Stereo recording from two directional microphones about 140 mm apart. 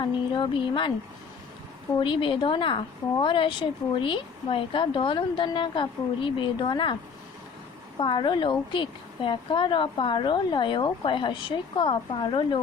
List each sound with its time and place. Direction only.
0.0 s a woman's voice: 35° left (ahead or behind)
2.0 s a woman's voice: 35° left (ahead or behind)
7.9 s a woman's voice: 35° left (ahead or behind)